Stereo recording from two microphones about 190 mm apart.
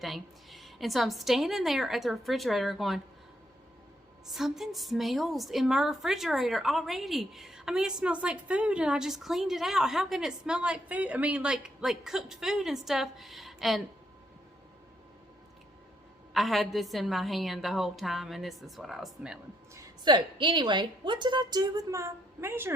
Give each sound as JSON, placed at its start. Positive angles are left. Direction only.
{"t": 0.0, "sound": "a woman's voice", "side_deg": 0}
{"t": 4.3, "sound": "a woman's voice", "side_deg": 0}
{"t": 16.3, "sound": "a woman's voice", "side_deg": 0}
{"t": 19.7, "sound": "a woman's voice", "side_deg": -20}